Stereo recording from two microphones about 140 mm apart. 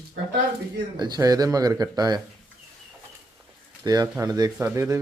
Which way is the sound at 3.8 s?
25° right (ahead or behind).